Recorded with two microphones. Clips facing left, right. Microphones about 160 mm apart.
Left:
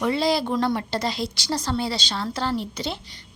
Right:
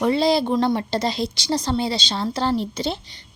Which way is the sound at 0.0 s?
25° right (ahead or behind).